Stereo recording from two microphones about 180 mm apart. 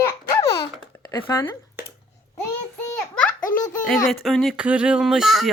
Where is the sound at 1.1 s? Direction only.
25° left (ahead or behind).